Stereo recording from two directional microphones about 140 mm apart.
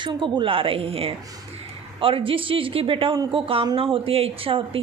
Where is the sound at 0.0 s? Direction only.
35° right (ahead or behind).